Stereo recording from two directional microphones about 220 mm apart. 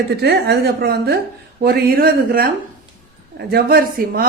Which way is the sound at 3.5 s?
45° right (ahead or behind).